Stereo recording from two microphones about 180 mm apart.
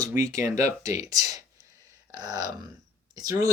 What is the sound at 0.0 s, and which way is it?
Speech, 20° right (ahead or behind).